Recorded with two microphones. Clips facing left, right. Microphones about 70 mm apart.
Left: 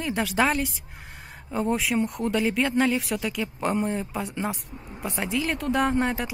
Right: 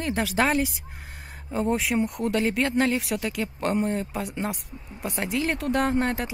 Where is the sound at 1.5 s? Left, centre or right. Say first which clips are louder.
Even; centre.